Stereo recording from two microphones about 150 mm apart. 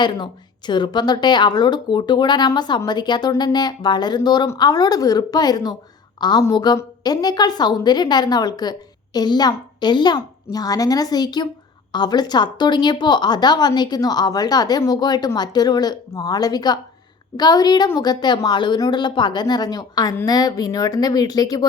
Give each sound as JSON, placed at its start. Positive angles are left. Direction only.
{"t": 0.0, "sound": "a woman's voice", "side_deg": 30}